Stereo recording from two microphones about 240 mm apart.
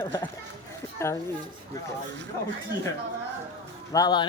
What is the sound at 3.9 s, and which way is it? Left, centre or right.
Speech, centre.